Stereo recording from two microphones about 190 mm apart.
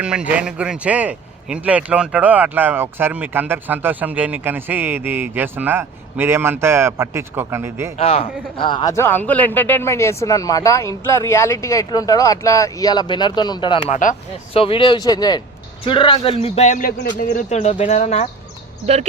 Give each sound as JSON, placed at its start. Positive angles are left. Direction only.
{"t": 0.0, "sound": "speech", "side_deg": -5}
{"t": 7.9, "sound": "speech", "side_deg": 30}
{"t": 13.9, "sound": "speech", "side_deg": 40}
{"t": 14.5, "sound": "speech", "side_deg": 30}